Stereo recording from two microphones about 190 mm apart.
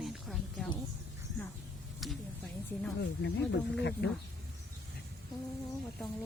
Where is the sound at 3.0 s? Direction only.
65° left (ahead or behind).